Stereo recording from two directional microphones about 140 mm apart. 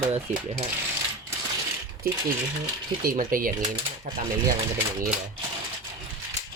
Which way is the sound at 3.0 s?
85° right.